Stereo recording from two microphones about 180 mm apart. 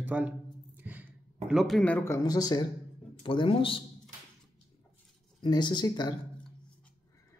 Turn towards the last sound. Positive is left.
turn(degrees=25)  # may be behind; listen again after turning